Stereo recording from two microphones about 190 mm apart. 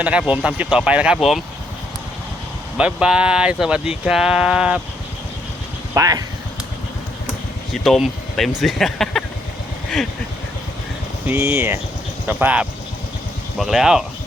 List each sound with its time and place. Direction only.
0.0 s speech: 5° right (ahead or behind)
2.7 s speech: 5° right (ahead or behind)
5.9 s speech: 15° right (ahead or behind)
7.7 s speech: centre (ahead or behind)
11.3 s speech: 10° right (ahead or behind)